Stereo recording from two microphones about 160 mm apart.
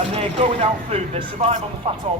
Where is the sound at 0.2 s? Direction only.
40° right (ahead or behind).